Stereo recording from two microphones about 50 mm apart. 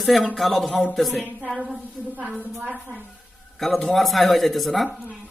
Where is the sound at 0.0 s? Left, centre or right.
Centre.